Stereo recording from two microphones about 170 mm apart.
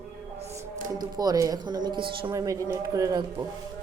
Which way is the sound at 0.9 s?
25° right (ahead or behind).